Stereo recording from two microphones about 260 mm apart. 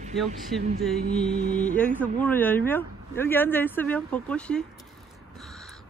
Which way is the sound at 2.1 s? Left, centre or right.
Centre.